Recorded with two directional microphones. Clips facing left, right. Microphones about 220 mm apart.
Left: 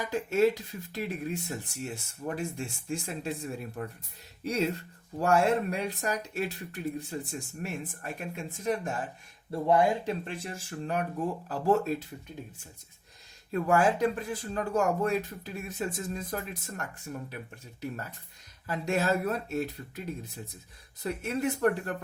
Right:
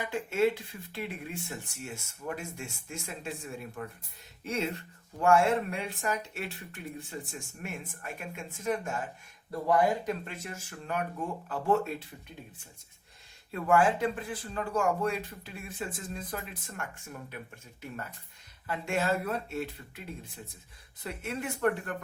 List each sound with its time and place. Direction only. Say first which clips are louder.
0.0 s speech: left 3 dB; 40° left (ahead or behind)
13.5 s speech: left 1 dB; 40° left (ahead or behind)
21.0 s speech: left 6 dB; 35° left (ahead or behind)